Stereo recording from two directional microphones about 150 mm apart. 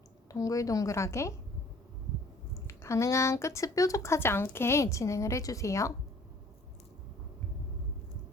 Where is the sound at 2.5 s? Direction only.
20° left (ahead or behind).